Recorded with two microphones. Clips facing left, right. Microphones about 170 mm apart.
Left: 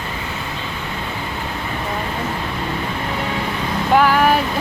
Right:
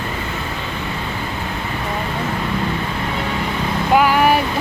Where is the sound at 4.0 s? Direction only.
10° right (ahead or behind).